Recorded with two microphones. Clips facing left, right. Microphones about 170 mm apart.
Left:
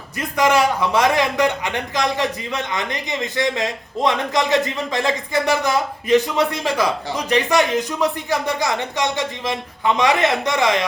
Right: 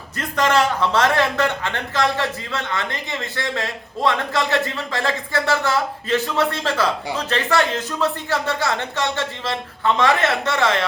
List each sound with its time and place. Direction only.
0.2 s a man's voice: 10° left (ahead or behind)